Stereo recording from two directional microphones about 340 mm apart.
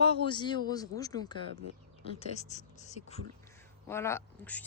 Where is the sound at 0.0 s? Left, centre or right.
Centre.